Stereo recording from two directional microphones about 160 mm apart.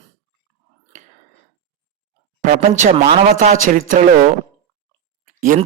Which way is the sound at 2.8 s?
45° right (ahead or behind).